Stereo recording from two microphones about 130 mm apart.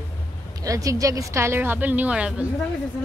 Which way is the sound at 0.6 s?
25° right (ahead or behind).